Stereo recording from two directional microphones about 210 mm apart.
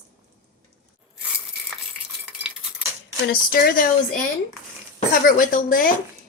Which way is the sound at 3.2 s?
45° left (ahead or behind).